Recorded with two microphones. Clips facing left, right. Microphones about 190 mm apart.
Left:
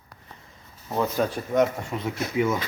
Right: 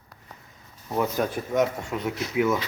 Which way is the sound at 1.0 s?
10° right (ahead or behind).